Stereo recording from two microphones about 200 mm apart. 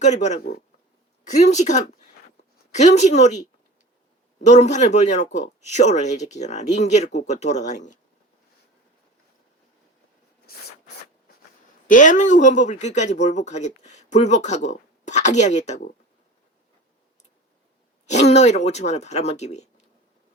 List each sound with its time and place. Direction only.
0.0 s speech: 35° left (ahead or behind)
4.4 s speech: 35° left (ahead or behind)
11.9 s speech: 40° left (ahead or behind)
18.0 s speech: 35° left (ahead or behind)